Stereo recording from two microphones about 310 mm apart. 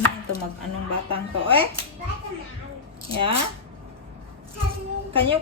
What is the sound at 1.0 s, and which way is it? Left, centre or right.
Speech, centre.